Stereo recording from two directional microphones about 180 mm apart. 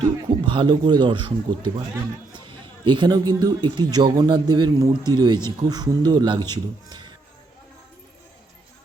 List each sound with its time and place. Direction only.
0.3 s a man's voice: 25° right (ahead or behind)
2.8 s a man's voice: 25° right (ahead or behind)